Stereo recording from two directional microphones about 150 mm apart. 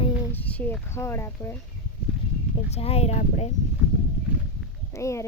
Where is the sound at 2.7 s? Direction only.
45° left (ahead or behind).